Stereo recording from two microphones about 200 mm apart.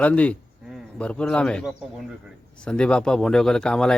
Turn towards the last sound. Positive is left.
turn(degrees=5)  # may be behind; listen again after turning